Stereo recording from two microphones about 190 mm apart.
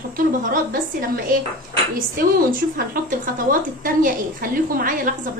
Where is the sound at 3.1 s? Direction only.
45° right (ahead or behind).